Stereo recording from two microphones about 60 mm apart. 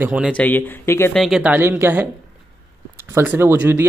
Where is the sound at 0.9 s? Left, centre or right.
Left.